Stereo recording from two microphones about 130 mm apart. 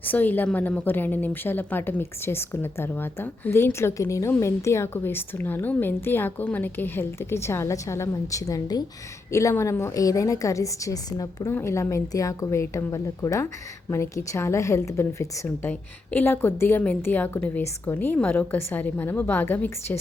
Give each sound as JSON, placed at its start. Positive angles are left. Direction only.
{"t": 0.0, "sound": "a woman's voice", "side_deg": 15}